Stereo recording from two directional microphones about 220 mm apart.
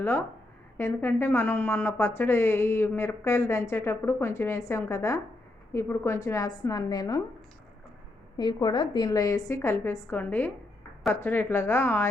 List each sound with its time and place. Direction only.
0.0 s a woman's voice: 10° left (ahead or behind)
8.4 s a woman's voice: 20° left (ahead or behind)